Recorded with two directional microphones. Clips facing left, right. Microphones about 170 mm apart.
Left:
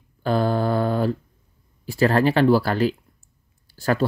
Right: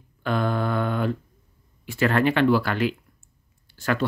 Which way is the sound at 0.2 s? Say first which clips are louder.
Left 4 dB; 35° left (ahead or behind).